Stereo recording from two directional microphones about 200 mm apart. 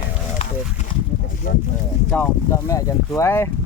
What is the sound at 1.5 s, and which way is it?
Speech, 45° left (ahead or behind).